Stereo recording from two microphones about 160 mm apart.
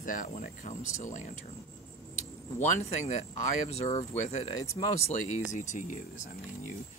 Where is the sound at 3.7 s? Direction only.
40° left (ahead or behind).